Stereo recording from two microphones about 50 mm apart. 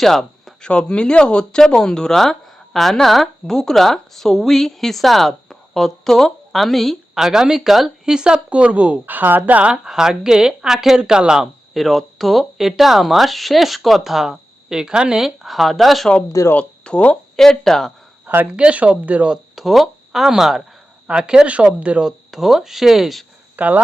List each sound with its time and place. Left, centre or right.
0.0 s a sound: centre
0.6 s speech: left; by 6.9 s centre
7.1 s speech: centre
8.0 s speech: centre
9.0 s speech: right
9.7 s speech: centre
11.7 s speech: centre
16.6 s speech: left
17.3 s speech: centre
18.5 s speech: right
19.5 s speech: centre
21.1 s speech: centre
22.3 s speech: centre
23.6 s speech: right